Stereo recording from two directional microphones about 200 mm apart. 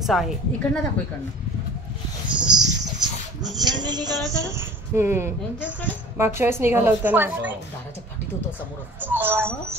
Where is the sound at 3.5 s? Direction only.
20° right (ahead or behind).